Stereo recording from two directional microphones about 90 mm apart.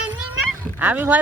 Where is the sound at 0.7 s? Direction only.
20° right (ahead or behind).